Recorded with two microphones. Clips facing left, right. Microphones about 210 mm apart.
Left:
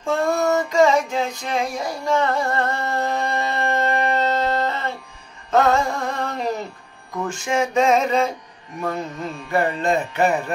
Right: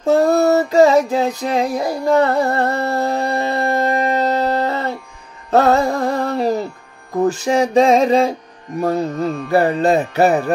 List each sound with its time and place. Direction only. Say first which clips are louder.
0.0 s a sound: right 7 dB; 35° right (ahead or behind)
5.5 s music: right 4 dB; 35° right (ahead or behind)
7.2 s mantra: right 7 dB; 35° right (ahead or behind)